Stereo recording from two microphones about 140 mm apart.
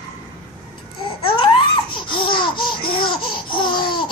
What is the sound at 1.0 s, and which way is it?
Babbling, 40° left (ahead or behind).